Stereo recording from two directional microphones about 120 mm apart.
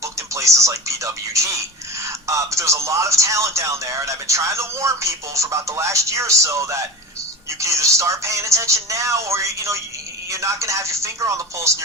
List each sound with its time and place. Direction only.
0.0 s speech: 25° right (ahead or behind)